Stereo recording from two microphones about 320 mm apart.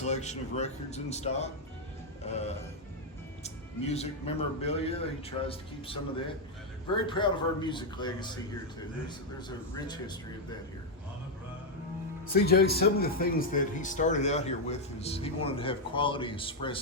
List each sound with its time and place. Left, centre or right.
0.0 s a man's voice: left
7.1 s a man's voice: centre
9.7 s a man's voice: centre
12.3 s speech: left